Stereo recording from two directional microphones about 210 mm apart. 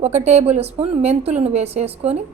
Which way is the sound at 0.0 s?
30° right (ahead or behind).